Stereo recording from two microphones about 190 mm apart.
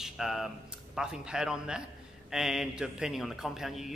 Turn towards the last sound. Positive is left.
turn(degrees=0)  # may be behind; listen again after turning